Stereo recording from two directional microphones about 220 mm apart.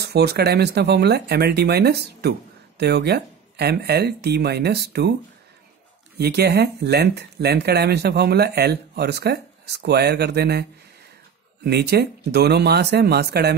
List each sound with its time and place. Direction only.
0.0 s speech: 45° right (ahead or behind)
6.1 s speech: 45° right (ahead or behind)